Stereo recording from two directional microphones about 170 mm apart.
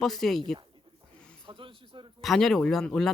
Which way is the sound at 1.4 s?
30° right (ahead or behind).